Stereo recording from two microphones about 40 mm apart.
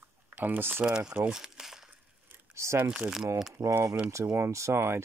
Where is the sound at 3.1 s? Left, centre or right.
Centre.